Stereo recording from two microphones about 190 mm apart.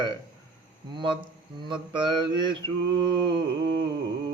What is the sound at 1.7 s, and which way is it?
Mantra, 25° right (ahead or behind).